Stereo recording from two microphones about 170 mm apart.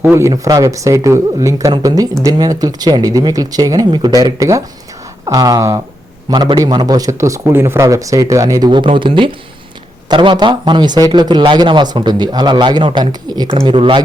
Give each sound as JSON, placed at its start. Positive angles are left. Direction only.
{"t": 0.0, "sound": "a man's voice", "side_deg": -15}